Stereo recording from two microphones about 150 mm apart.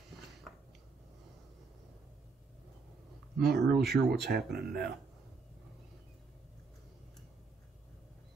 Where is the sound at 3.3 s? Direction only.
90° right.